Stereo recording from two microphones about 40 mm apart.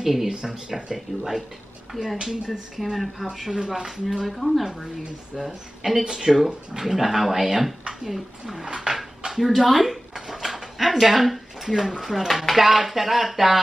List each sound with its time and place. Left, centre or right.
0.0 s speech: centre
0.9 s speech: centre
3.5 s speech: centre
4.3 s speech: centre
6.0 s speech: centre
10.1 s a sound: centre
12.0 s speech: centre